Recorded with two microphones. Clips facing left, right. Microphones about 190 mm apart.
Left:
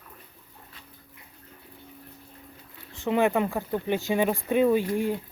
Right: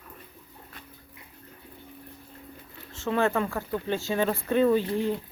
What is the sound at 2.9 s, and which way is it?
Speech, 15° left (ahead or behind).